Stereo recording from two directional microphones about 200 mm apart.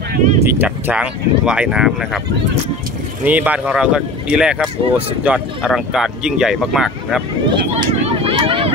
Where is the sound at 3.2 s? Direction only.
10° right (ahead or behind).